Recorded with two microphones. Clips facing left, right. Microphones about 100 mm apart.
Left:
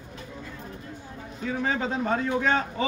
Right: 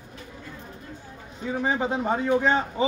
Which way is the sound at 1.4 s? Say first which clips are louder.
Right 2 dB; 20° right (ahead or behind).